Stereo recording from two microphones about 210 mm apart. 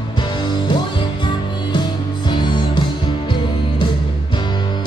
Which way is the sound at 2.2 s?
20° left (ahead or behind).